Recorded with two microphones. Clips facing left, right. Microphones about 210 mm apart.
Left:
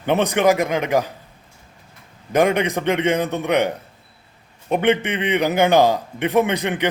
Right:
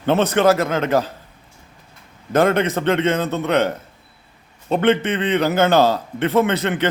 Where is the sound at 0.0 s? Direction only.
15° left (ahead or behind).